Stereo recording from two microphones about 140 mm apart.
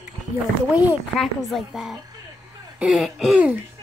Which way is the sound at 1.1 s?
Centre (ahead or behind).